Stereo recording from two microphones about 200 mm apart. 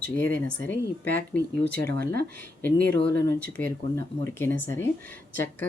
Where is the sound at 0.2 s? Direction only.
65° left (ahead or behind).